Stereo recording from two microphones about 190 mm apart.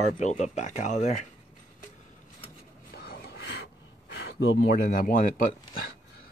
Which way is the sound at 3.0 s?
55° left (ahead or behind).